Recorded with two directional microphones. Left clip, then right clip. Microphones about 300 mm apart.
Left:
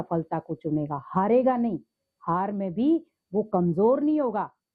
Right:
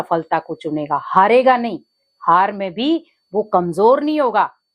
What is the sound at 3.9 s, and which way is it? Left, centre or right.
Speech, centre.